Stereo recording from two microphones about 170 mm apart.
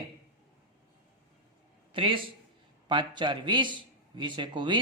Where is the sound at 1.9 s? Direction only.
30° right (ahead or behind).